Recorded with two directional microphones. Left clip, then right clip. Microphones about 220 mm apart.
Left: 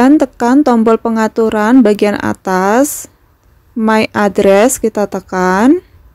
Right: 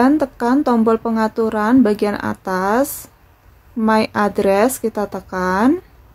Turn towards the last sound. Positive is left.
turn(degrees=35)  # may be behind; listen again after turning